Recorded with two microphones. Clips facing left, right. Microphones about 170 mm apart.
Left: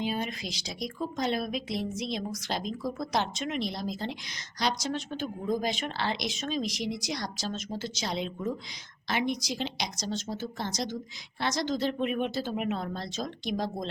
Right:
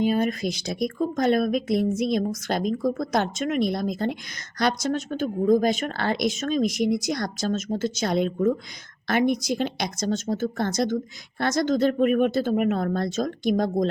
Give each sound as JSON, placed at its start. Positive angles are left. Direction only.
{"t": 0.0, "sound": "speech", "side_deg": -50}